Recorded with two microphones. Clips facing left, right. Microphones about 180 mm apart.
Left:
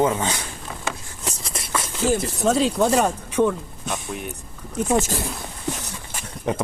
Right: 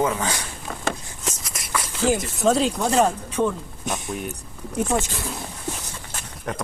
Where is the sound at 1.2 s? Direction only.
35° left (ahead or behind).